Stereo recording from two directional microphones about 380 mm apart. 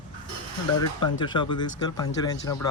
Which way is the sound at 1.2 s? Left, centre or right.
Centre.